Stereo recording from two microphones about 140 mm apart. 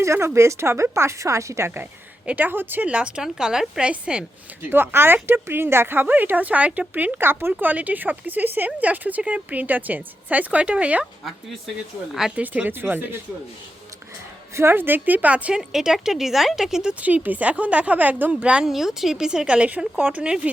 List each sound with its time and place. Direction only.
0.0 s speech: 20° right (ahead or behind)
12.1 s speech: 5° right (ahead or behind)
14.5 s speech: 15° right (ahead or behind)